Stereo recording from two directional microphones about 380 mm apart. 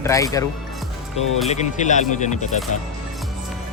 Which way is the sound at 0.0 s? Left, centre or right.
Centre.